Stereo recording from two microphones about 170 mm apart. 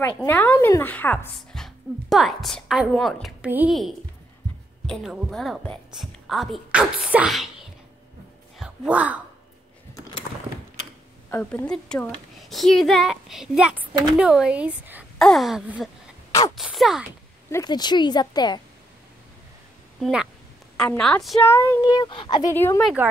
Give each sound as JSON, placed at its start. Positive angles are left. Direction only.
{"t": 0.2, "sound": "a woman's voice", "side_deg": 10}
{"t": 8.5, "sound": "speech", "side_deg": -5}
{"t": 11.2, "sound": "a woman's voice", "side_deg": 15}
{"t": 16.3, "sound": "a sound", "side_deg": 20}
{"t": 16.5, "sound": "a woman's voice", "side_deg": 0}
{"t": 17.5, "sound": "speech", "side_deg": 20}
{"t": 20.0, "sound": "a woman's voice", "side_deg": -5}
{"t": 21.4, "sound": "speech", "side_deg": 10}
{"t": 22.5, "sound": "speech", "side_deg": 15}